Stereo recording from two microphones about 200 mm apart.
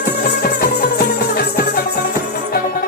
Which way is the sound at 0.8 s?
50° left (ahead or behind).